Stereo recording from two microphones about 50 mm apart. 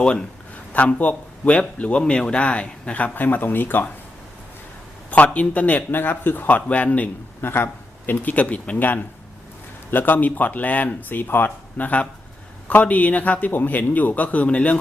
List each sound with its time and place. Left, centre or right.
0.0 s a man's voice: centre
0.5 s a man's voice: left
3.2 s speech: left
5.1 s a man's voice: left
5.9 s speech: left
6.7 s a man's voice: left
7.4 s a man's voice: left
11.8 s a man's voice: left